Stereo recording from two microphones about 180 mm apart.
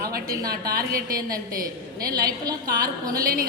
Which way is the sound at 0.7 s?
55° right (ahead or behind).